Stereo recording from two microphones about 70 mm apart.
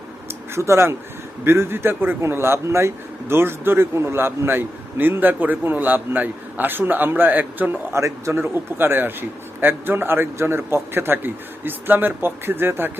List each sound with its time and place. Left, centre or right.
0.5 s a man's voice: right
7.9 s a man's voice: right